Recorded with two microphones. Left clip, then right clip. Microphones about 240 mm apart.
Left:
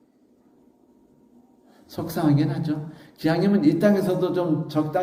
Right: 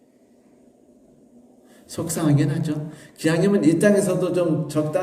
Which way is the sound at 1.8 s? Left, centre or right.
Left.